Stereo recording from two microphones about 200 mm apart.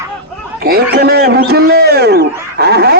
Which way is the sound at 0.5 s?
50° right (ahead or behind).